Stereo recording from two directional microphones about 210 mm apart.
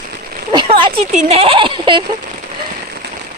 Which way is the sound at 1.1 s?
30° right (ahead or behind).